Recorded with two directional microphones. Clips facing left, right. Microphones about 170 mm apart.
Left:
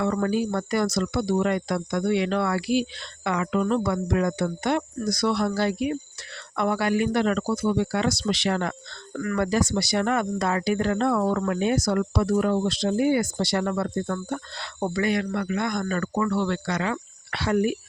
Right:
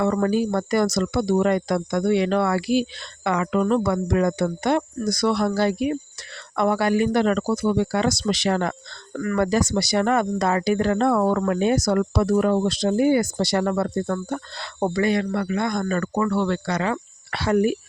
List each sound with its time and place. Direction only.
0.0 s speech: 45° right (ahead or behind)